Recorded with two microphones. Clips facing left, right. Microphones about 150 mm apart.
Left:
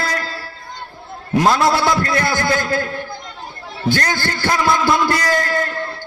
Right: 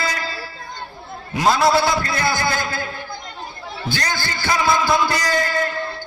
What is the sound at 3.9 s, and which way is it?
Speech, 55° left (ahead or behind).